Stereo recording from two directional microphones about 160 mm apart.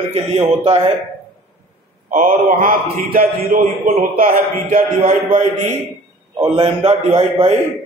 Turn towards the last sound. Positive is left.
turn(degrees=-40)  # may be behind; listen again after turning